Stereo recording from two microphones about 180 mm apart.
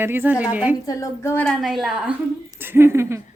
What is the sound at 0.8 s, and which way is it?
Speech, 20° left (ahead or behind).